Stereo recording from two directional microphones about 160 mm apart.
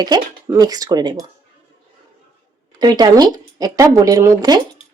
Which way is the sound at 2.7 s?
25° right (ahead or behind).